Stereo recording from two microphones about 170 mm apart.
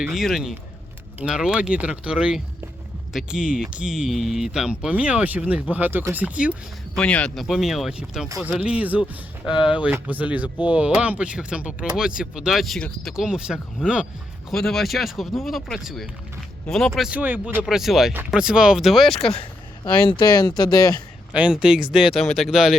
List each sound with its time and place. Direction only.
0.0 s speech: centre (ahead or behind)
6.9 s speech: 5° left (ahead or behind)
19.3 s speech: 30° left (ahead or behind)
21.3 s speech: 5° right (ahead or behind)